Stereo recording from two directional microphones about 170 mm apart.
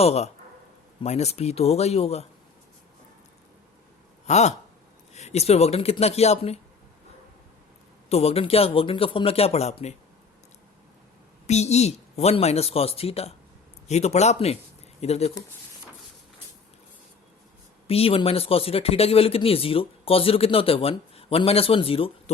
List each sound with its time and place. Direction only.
0.0 s speech: 40° left (ahead or behind)
4.3 s speech: 40° left (ahead or behind)
8.1 s speech: 35° left (ahead or behind)
11.4 s speech: 40° left (ahead or behind)
17.8 s speech: 35° left (ahead or behind)